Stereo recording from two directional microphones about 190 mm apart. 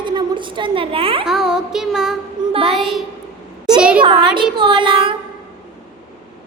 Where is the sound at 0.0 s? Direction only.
25° right (ahead or behind).